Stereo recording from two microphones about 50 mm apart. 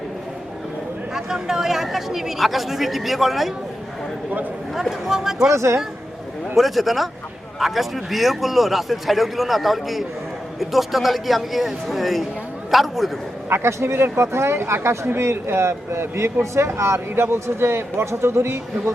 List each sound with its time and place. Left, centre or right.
1.1 s a man's voice: centre
4.7 s speech: centre
5.5 s speech: right
6.6 s a man's voice: centre
13.5 s speech: right